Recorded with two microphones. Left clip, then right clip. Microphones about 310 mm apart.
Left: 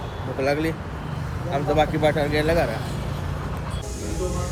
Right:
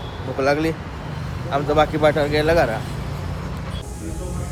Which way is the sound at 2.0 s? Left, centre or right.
Centre.